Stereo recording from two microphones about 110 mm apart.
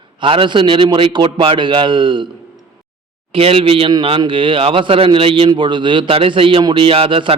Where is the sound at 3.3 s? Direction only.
55° right (ahead or behind).